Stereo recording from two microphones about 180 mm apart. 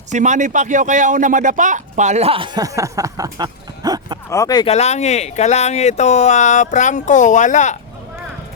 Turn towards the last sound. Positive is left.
turn(degrees=40)  # may be behind; listen again after turning